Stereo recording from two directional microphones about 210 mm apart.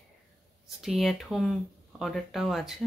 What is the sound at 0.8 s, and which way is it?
Speech, centre (ahead or behind).